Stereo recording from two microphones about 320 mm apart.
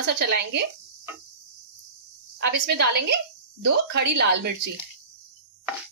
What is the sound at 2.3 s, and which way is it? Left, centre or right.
A woman's voice, right.